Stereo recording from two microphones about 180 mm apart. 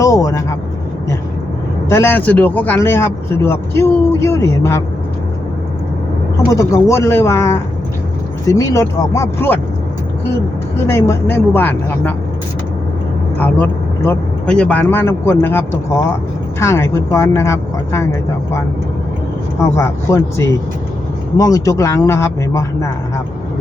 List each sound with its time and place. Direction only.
0.0 s vehicle: 20° left (ahead or behind)
1.9 s speech: 10° left (ahead or behind)
6.5 s speech: 20° left (ahead or behind)
10.8 s speech: 15° left (ahead or behind)
13.4 s speech: 10° left (ahead or behind)
19.5 s speech: 15° left (ahead or behind)